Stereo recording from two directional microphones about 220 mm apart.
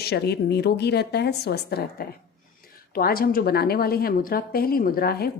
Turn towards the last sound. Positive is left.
turn(degrees=45)  # may be behind; listen again after turning